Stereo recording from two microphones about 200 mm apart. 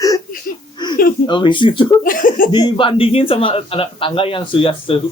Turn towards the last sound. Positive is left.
turn(degrees=25)  # may be behind; listen again after turning